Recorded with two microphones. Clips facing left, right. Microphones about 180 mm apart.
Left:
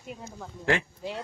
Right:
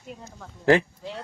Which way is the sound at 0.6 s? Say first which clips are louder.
Right 8 dB; 35° right (ahead or behind).